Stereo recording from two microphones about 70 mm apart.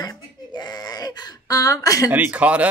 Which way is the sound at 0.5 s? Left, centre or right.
Left.